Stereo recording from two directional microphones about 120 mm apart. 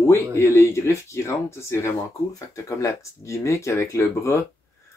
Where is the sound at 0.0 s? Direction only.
20° left (ahead or behind).